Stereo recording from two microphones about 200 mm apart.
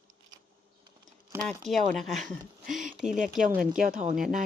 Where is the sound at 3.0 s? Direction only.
Centre (ahead or behind).